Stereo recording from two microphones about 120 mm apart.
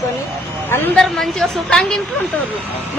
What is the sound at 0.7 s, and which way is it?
Speech, 15° left (ahead or behind).